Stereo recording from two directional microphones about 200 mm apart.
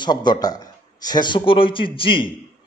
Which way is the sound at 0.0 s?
20° left (ahead or behind).